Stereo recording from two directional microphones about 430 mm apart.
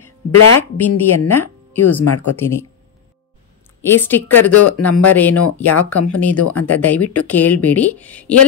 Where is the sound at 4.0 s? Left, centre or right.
Centre.